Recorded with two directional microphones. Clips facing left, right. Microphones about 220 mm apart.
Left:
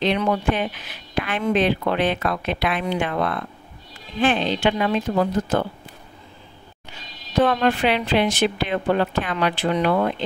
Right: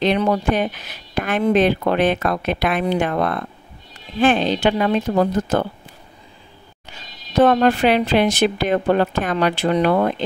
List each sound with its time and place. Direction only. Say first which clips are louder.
0.0 s speech: right 3 dB; 40° right (ahead or behind)
7.3 s speech: right 4 dB; 40° right (ahead or behind)